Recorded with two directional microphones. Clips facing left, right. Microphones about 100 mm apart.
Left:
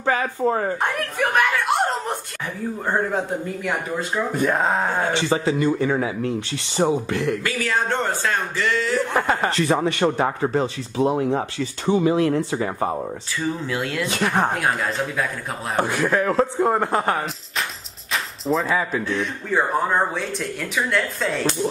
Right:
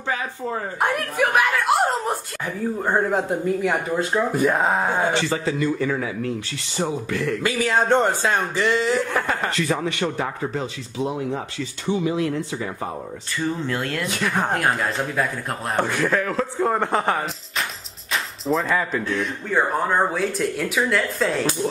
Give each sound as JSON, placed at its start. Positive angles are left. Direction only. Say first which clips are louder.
{"t": 0.0, "sound": "a sound", "louder": "left 6 dB", "side_deg": 50}
{"t": 1.3, "sound": "chuckle", "louder": "even", "side_deg": 0}
{"t": 2.8, "sound": "speech", "louder": "right 1 dB", "side_deg": -5}
{"t": 5.1, "sound": "a man's voice", "louder": "left 2 dB", "side_deg": 20}
{"t": 7.4, "sound": "speech", "louder": "right 3 dB", "side_deg": -20}
{"t": 9.1, "sound": "a man's voice", "louder": "left 3 dB", "side_deg": 20}
{"t": 9.5, "sound": "speech", "louder": "left 3 dB", "side_deg": 35}
{"t": 13.4, "sound": "speech", "louder": "right 1 dB", "side_deg": 0}
{"t": 14.0, "sound": "a man's voice", "louder": "left 5 dB", "side_deg": 25}
{"t": 14.5, "sound": "speech", "louder": "right 1 dB", "side_deg": 0}
{"t": 15.7, "sound": "a man's voice", "louder": "left 1 dB", "side_deg": 10}
{"t": 16.2, "sound": "a man's voice", "louder": "left 4 dB", "side_deg": 25}
{"t": 16.6, "sound": "speech", "louder": "left 1 dB", "side_deg": 5}